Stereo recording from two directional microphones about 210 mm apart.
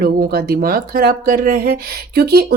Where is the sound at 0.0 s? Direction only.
45° right (ahead or behind).